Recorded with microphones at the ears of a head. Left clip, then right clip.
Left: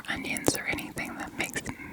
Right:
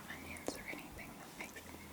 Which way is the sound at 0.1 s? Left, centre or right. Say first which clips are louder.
Left 17 dB; left.